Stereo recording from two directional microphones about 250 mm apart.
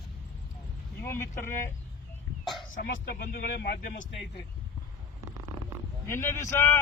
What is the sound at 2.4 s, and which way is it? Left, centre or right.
Throat clearing, centre.